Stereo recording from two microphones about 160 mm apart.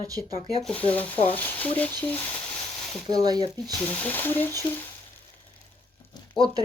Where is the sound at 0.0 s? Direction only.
20° right (ahead or behind).